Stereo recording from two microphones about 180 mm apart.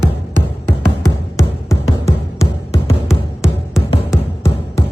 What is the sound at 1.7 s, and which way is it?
Music, 15° left (ahead or behind).